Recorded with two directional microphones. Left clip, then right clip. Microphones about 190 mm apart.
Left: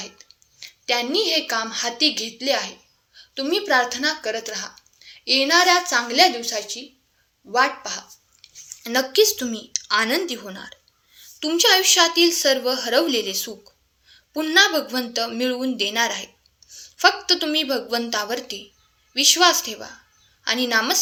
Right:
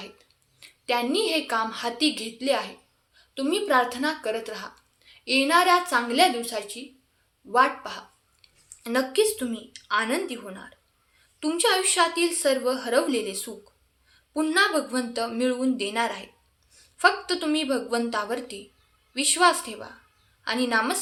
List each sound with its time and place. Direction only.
0.0 s speech: 10° left (ahead or behind)